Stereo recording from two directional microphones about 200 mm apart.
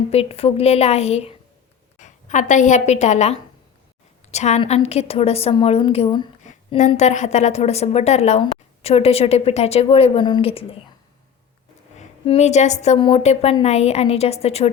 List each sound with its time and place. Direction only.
0.1 s a woman's voice: 30° left (ahead or behind)
6.4 s a woman's voice: 35° left (ahead or behind)
11.9 s a woman's voice: 30° left (ahead or behind)